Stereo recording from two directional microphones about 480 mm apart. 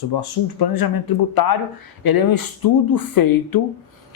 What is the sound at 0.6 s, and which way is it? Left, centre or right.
Speech, left.